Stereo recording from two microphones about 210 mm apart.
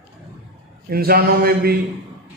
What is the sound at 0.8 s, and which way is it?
Speech, 45° right (ahead or behind).